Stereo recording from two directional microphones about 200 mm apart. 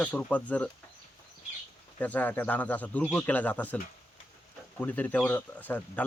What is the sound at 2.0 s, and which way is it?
A man's voice, 10° left (ahead or behind).